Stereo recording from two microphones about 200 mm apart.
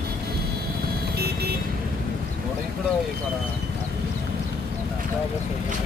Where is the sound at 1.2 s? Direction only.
50° right (ahead or behind).